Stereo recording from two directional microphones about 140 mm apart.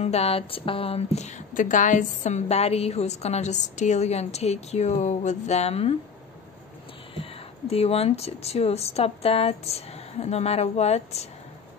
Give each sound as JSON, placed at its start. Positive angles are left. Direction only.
{"t": 0.0, "sound": "a woman's voice", "side_deg": 45}
{"t": 7.2, "sound": "a woman's voice", "side_deg": 45}